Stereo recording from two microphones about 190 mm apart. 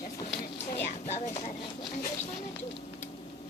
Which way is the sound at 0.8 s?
35° left (ahead or behind).